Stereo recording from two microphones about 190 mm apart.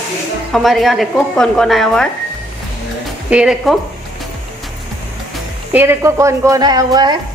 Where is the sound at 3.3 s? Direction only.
5° right (ahead or behind).